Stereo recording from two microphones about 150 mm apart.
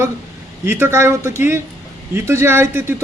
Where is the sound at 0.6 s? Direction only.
15° right (ahead or behind).